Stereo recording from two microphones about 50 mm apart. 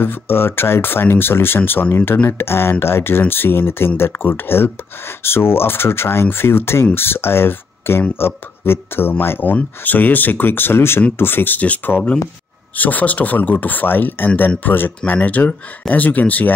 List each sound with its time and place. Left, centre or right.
0.0 s speech: left
15.0 s speech: left